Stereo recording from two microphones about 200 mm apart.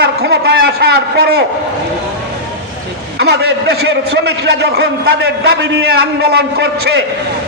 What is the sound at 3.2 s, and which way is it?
A man's voice, 55° right (ahead or behind).